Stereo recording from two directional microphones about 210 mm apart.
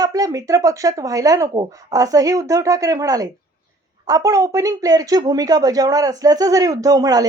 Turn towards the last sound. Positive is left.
turn(degrees=-15)  # may be behind; listen again after turning